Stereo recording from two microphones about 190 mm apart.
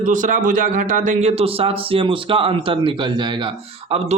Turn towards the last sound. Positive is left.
turn(degrees=-30)  # may be behind; listen again after turning